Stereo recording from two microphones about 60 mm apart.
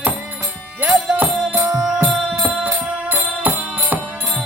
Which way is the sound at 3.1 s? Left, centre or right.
Right.